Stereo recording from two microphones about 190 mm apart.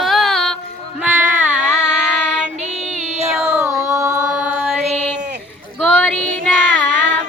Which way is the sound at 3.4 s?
10° right (ahead or behind).